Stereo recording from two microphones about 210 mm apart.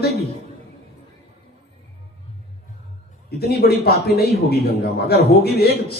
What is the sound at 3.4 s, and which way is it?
A man's voice, 50° left (ahead or behind).